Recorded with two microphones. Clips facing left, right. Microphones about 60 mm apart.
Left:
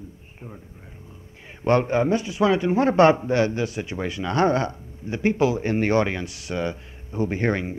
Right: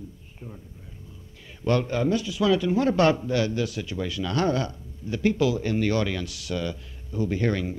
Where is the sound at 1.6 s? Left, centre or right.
Left.